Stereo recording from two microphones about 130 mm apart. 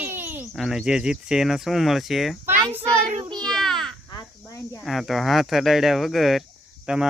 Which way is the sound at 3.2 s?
35° right (ahead or behind).